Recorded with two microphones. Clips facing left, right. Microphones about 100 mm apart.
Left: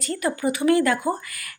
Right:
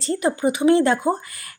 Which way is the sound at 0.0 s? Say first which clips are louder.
Right 4 dB; 25° right (ahead or behind).